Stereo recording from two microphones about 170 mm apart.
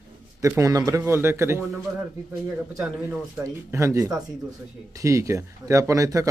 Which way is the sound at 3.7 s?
15° right (ahead or behind).